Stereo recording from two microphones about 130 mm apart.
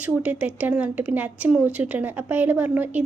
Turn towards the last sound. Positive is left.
turn(degrees=-15)  # may be behind; listen again after turning